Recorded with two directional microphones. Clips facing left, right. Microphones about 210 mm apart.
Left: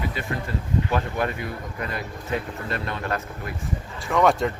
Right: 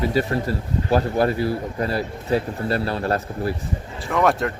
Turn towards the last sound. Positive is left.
turn(degrees=0)  # may be behind; listen again after turning